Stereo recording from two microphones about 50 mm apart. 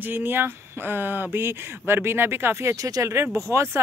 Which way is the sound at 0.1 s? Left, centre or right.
Right.